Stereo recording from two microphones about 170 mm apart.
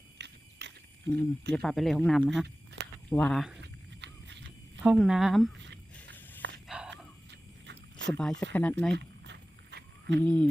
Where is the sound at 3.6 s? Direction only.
90° right.